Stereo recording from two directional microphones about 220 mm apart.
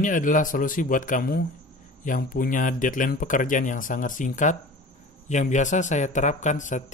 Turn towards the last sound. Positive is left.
turn(degrees=35)  # may be behind; listen again after turning